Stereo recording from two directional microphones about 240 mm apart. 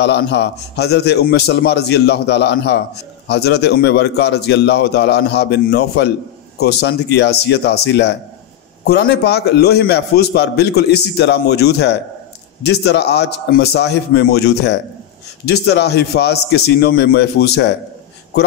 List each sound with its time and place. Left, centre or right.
0.0 s a man's voice: left